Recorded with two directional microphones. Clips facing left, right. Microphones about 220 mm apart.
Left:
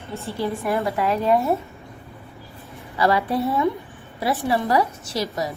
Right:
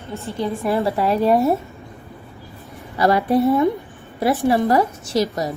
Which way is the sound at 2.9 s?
45° right (ahead or behind).